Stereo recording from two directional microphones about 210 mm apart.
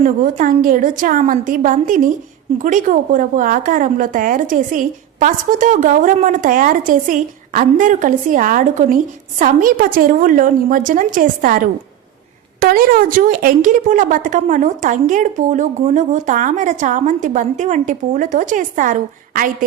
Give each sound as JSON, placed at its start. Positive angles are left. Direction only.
{"t": 0.0, "sound": "a woman's voice", "side_deg": -40}